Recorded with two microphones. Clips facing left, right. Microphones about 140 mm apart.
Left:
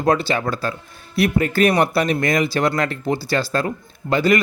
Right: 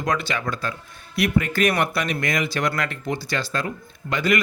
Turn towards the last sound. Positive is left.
turn(degrees=35)  # may be behind; listen again after turning